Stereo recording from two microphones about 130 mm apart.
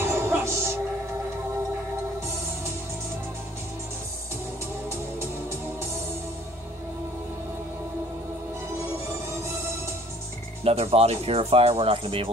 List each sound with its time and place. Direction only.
0.0 s music: 20° right (ahead or behind)
10.6 s speech: 50° right (ahead or behind)